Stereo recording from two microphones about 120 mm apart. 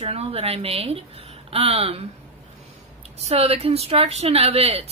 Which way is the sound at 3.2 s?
55° right (ahead or behind).